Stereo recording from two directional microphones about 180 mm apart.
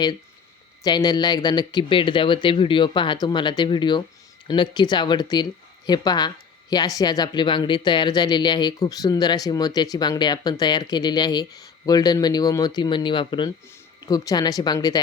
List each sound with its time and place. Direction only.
0.9 s speech: 25° left (ahead or behind)